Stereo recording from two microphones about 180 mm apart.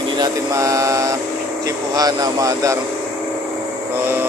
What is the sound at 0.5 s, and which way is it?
Speech, 15° right (ahead or behind).